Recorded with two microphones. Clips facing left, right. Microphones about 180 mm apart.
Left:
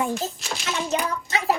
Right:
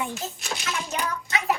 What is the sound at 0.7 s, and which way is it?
Speech, 30° left (ahead or behind).